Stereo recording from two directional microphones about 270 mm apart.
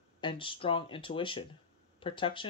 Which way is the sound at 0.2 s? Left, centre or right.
Centre.